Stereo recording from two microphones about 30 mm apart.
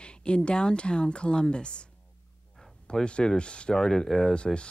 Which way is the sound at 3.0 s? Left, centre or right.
Left.